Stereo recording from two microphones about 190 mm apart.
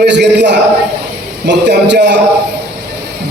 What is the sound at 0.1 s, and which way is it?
A man's voice, 65° right (ahead or behind).